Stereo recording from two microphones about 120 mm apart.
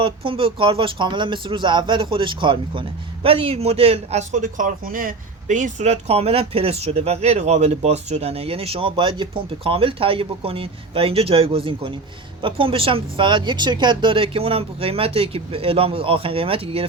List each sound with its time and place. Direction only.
0.0 s speech: 45° right (ahead or behind)